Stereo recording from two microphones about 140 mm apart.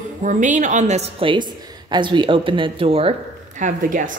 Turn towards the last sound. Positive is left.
turn(degrees=-70)  # may be behind; listen again after turning